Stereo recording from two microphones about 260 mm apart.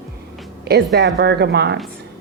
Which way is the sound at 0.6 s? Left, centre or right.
Right.